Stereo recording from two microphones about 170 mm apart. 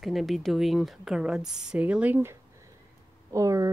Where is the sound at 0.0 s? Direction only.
Centre (ahead or behind).